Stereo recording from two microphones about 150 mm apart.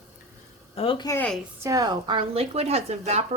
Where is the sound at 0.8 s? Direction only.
35° left (ahead or behind).